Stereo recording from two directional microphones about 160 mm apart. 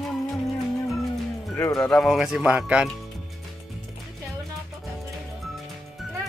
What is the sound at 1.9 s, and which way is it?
Speech, centre (ahead or behind).